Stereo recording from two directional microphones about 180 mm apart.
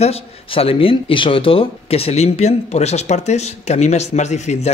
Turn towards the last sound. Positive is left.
turn(degrees=40)  # may be behind; listen again after turning